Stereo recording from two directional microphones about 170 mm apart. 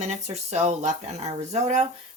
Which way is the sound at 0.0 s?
40° right (ahead or behind).